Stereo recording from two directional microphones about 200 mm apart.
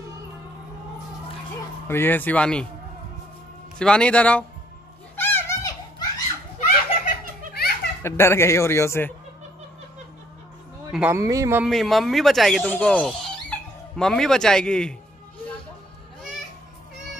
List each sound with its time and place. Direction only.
1.9 s speech: 10° left (ahead or behind)
3.7 s speech: 5° left (ahead or behind)
5.1 s children playing: 10° left (ahead or behind)
6.6 s giggle: 45° left (ahead or behind)
8.0 s speech: 15° left (ahead or behind)
10.9 s speech: 10° right (ahead or behind)
11.6 s speech: centre (ahead or behind)